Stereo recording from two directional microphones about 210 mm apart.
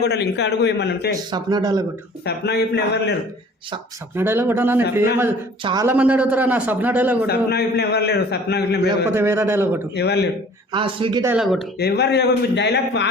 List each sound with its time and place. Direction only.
0.0 s a man's voice: 55° left (ahead or behind)
1.3 s speech: 20° right (ahead or behind)
2.2 s a man's voice: 50° left (ahead or behind)
4.1 s a man's voice: 10° right (ahead or behind)
7.3 s a man's voice: 50° left (ahead or behind)
9.0 s a man's voice: 10° right (ahead or behind)
9.9 s a man's voice: 50° left (ahead or behind)
10.7 s speech: 25° right (ahead or behind)
11.3 s speech: centre (ahead or behind)
11.8 s a man's voice: 50° left (ahead or behind)